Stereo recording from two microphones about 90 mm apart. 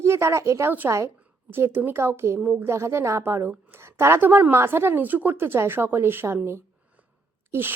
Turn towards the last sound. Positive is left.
turn(degrees=-25)  # may be behind; listen again after turning